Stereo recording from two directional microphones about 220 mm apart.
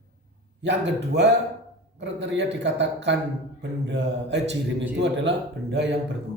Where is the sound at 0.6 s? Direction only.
50° right (ahead or behind).